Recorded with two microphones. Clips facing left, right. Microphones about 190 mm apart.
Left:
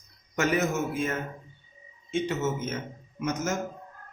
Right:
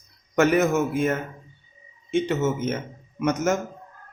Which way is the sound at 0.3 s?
60° right (ahead or behind).